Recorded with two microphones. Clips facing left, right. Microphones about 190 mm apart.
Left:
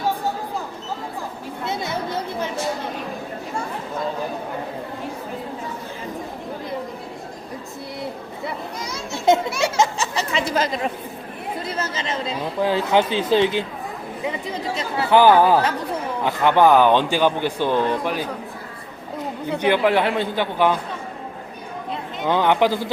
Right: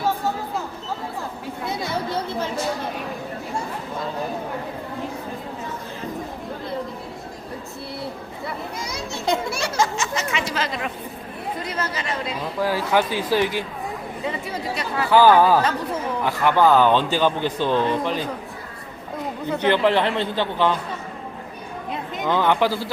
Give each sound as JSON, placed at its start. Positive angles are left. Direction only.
{"t": 9.6, "sound": "speech", "side_deg": 25}
{"t": 11.6, "sound": "speech", "side_deg": 30}
{"t": 19.5, "sound": "speech", "side_deg": 10}
{"t": 22.3, "sound": "speech", "side_deg": 15}